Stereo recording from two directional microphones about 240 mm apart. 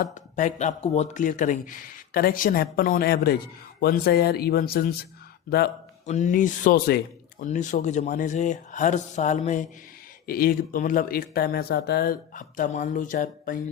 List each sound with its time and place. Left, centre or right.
0.0 s speech: left
6.1 s speech: left